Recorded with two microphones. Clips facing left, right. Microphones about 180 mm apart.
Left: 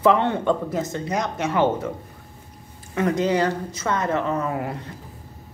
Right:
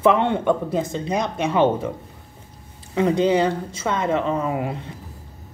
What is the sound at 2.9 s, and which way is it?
Speech, 20° right (ahead or behind).